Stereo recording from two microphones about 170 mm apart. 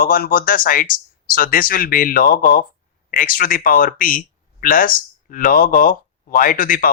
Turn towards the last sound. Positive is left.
turn(degrees=55)  # may be behind; listen again after turning